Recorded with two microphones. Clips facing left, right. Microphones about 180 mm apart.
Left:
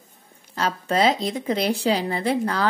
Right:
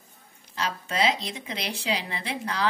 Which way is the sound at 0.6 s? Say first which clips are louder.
Left 6 dB; 45° left (ahead or behind).